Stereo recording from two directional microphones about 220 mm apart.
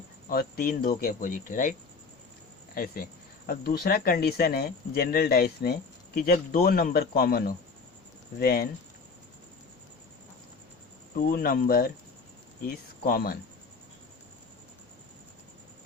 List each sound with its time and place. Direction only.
0.3 s speech: 40° left (ahead or behind)
2.7 s speech: 40° left (ahead or behind)
11.2 s speech: 40° left (ahead or behind)